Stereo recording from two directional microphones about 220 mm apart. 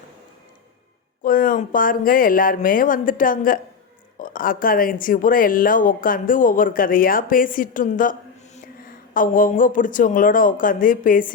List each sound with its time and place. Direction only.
1.2 s speech: 40° left (ahead or behind)